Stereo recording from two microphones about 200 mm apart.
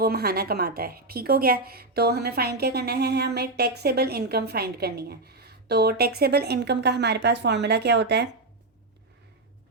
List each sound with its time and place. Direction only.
0.0 s a woman's voice: 50° right (ahead or behind)